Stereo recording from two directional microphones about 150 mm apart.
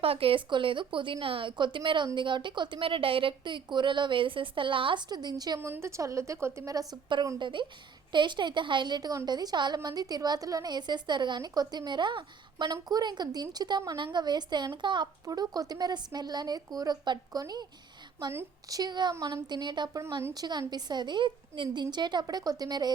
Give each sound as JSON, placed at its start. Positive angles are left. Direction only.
{"t": 0.0, "sound": "a woman's voice", "side_deg": -40}
{"t": 5.5, "sound": "a woman's voice", "side_deg": -15}